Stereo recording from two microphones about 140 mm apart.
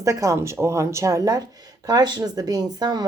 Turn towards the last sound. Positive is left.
turn(degrees=-30)  # may be behind; listen again after turning